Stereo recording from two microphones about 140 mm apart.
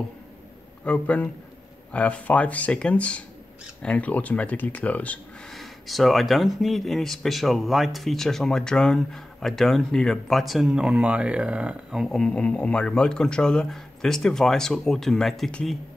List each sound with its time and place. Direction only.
0.8 s speech: 10° left (ahead or behind)